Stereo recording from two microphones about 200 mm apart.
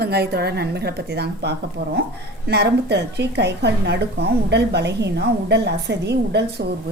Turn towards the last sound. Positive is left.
turn(degrees=-55)  # may be behind; listen again after turning